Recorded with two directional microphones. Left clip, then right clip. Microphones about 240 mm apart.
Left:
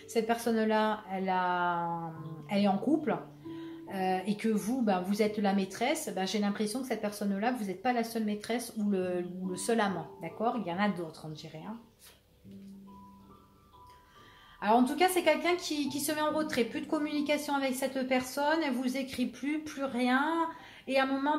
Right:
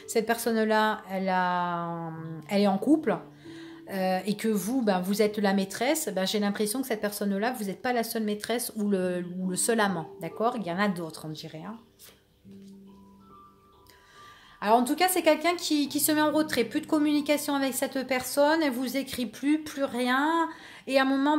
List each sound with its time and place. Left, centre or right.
0.1 s speech: right
14.6 s speech: right